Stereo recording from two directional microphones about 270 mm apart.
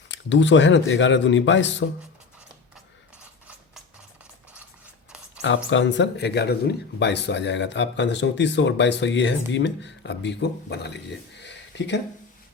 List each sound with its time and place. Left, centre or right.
0.1 s speech: left
5.7 s speech: left
11.3 s a sound: left